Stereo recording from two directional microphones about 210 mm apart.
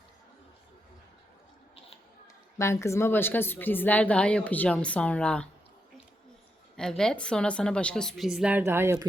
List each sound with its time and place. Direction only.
2.6 s a woman's voice: 15° left (ahead or behind)
6.7 s a woman's voice: 5° left (ahead or behind)